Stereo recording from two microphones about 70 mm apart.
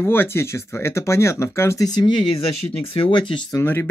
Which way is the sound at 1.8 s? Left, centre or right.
Left.